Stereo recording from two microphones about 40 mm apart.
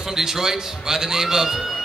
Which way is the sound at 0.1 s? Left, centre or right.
Centre.